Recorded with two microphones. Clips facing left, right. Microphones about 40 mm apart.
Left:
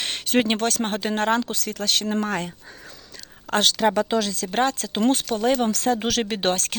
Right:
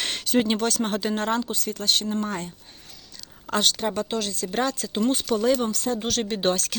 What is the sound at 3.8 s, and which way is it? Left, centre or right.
Speech, left.